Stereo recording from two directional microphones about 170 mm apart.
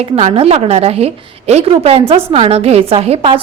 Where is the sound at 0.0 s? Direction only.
40° right (ahead or behind).